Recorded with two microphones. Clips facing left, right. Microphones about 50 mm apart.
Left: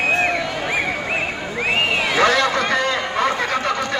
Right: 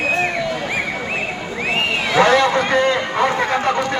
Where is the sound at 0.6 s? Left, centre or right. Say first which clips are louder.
Left 1 dB; centre.